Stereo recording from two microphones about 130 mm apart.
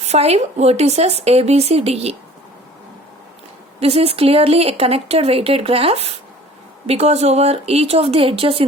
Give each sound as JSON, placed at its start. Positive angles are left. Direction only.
{"t": 0.0, "sound": "speech", "side_deg": -55}
{"t": 3.8, "sound": "speech", "side_deg": -50}